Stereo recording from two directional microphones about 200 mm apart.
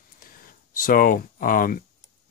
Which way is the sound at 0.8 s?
45° left (ahead or behind).